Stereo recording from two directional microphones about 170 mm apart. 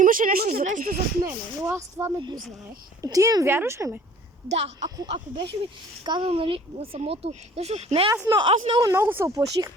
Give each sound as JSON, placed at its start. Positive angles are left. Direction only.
{"t": 0.0, "sound": "speech", "side_deg": -55}
{"t": 1.2, "sound": "speech", "side_deg": -15}
{"t": 4.4, "sound": "a child's voice", "side_deg": -90}
{"t": 5.0, "sound": "speech", "side_deg": -30}
{"t": 8.1, "sound": "speech", "side_deg": -15}